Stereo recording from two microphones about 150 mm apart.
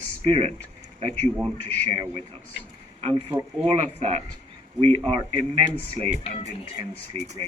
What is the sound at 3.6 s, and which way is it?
A man's voice, 40° right (ahead or behind).